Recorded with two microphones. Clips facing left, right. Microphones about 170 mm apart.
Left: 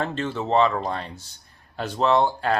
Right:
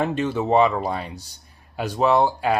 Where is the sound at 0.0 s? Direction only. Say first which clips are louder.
Right 4 dB; 15° right (ahead or behind).